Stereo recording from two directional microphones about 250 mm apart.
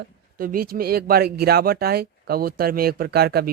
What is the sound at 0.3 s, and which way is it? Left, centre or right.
Speech, right.